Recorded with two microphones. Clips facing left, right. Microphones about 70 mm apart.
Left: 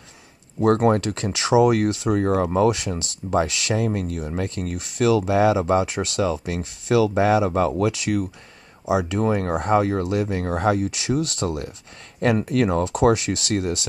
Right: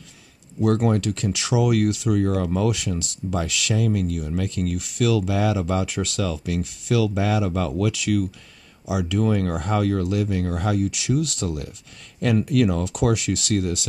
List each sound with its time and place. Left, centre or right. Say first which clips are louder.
0.6 s speech: left 3 dB; left